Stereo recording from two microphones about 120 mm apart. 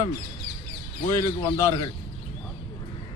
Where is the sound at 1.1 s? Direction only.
20° left (ahead or behind).